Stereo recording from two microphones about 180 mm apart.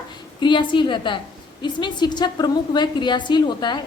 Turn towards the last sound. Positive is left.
turn(degrees=25)  # may be behind; listen again after turning